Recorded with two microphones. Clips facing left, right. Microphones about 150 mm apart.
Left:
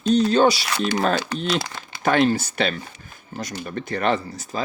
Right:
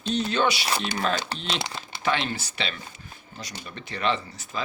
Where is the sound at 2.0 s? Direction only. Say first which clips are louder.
Left 9 dB; 45° left (ahead or behind).